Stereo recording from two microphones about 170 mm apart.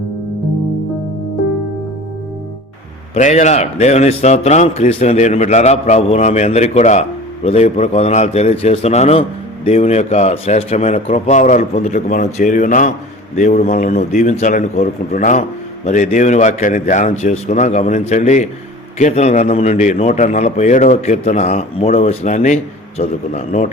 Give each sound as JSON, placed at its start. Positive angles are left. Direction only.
{"t": 3.2, "sound": "a man's voice", "side_deg": 45}